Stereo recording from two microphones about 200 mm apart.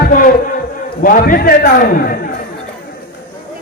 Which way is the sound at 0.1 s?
45° left (ahead or behind).